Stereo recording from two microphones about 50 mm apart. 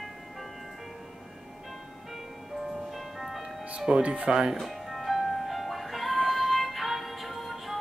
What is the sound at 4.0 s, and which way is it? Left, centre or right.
Speech, right.